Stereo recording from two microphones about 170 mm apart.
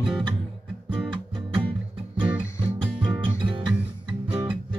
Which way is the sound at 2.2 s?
10° right (ahead or behind).